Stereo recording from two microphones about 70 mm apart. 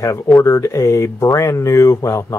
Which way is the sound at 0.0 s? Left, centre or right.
Left.